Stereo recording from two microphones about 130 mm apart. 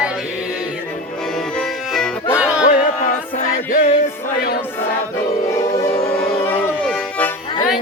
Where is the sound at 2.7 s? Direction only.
70° left (ahead or behind).